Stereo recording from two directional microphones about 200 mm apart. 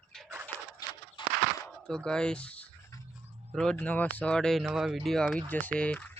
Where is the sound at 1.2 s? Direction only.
25° left (ahead or behind).